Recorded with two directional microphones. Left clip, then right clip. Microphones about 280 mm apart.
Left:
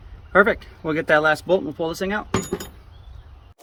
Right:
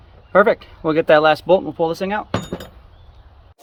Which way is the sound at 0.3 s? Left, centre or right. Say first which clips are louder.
Right 3 dB; right.